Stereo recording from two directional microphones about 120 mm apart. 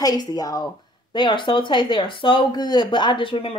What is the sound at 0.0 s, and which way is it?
A woman's voice, 30° left (ahead or behind).